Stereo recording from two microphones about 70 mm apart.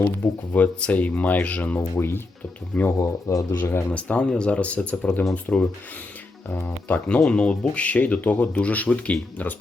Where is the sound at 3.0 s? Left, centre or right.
Left.